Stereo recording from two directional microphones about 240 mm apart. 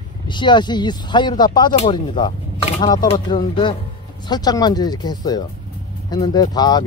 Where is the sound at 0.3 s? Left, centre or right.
Centre.